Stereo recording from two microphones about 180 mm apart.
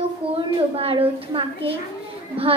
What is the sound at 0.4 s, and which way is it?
A woman's voice, 30° right (ahead or behind).